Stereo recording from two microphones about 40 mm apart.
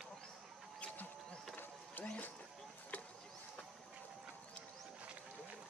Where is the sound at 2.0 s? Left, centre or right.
Left.